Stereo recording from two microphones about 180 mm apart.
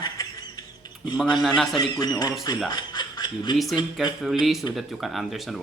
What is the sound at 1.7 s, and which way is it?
Speech, 25° left (ahead or behind).